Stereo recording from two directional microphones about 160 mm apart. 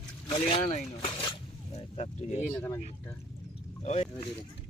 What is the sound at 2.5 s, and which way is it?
Speech, 15° left (ahead or behind).